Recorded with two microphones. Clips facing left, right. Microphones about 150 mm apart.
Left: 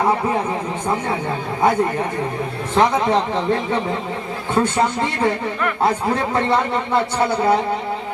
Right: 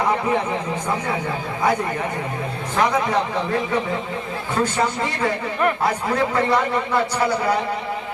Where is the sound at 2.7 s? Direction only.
25° left (ahead or behind).